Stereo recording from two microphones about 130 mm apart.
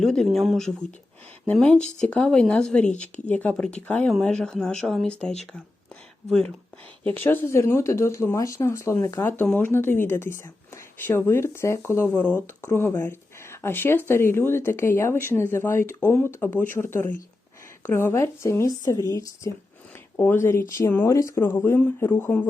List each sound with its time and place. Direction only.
0.0 s speech: centre (ahead or behind)